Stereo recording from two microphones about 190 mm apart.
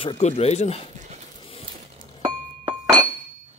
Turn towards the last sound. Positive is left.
turn(degrees=-15)  # may be behind; listen again after turning